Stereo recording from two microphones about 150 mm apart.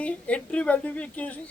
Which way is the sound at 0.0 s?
10° left (ahead or behind).